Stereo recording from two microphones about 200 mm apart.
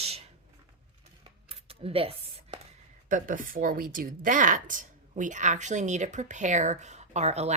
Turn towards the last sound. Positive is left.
turn(degrees=-35)  # may be behind; listen again after turning